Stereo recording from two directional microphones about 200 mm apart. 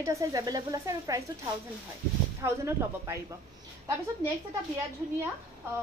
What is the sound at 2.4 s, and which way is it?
Speech, 15° right (ahead or behind).